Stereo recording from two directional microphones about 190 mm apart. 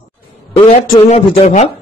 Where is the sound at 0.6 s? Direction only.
35° left (ahead or behind).